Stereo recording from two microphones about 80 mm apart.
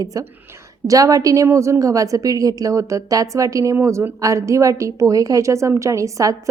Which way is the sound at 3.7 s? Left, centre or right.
Right.